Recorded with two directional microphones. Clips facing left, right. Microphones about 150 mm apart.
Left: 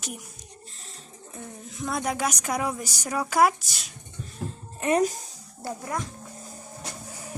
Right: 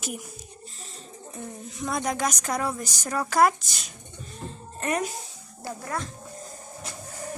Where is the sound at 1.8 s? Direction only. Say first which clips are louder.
Even; centre (ahead or behind).